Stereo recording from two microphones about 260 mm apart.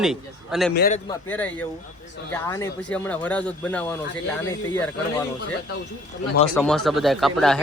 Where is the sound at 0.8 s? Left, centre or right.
Left.